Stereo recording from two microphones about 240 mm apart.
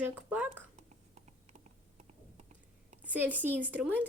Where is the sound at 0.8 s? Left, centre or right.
Right.